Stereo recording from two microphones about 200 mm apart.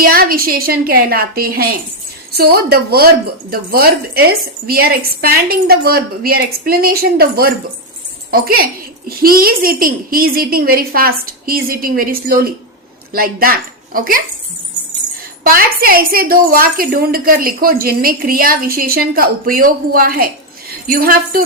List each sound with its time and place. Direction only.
0.0 s a woman's voice: 45° right (ahead or behind)
15.4 s a woman's voice: 45° right (ahead or behind)